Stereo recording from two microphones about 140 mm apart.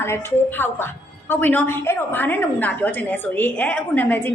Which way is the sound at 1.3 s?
15° left (ahead or behind).